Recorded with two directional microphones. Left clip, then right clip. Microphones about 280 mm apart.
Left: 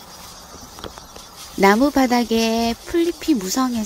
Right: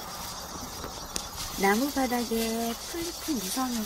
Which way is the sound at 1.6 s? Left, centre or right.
Left.